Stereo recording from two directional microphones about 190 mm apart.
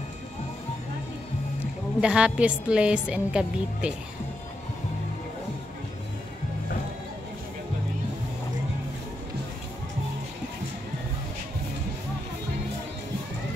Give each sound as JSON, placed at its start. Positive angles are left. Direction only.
{"t": 2.0, "sound": "a woman's voice", "side_deg": -5}